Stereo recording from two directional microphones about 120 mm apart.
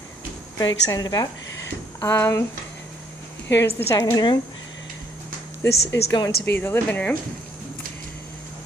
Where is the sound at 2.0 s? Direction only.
20° left (ahead or behind).